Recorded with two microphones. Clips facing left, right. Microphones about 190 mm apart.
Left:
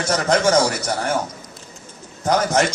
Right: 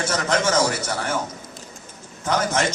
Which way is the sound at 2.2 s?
35° left (ahead or behind).